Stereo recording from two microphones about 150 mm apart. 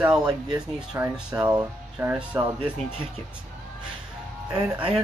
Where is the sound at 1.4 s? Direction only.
25° right (ahead or behind).